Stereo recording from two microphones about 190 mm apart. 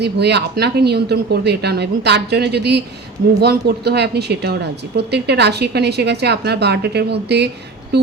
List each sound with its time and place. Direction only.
0.0 s a woman's voice: 60° right (ahead or behind)